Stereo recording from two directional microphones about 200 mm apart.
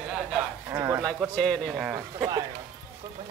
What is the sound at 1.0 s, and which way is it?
Speech, 5° left (ahead or behind).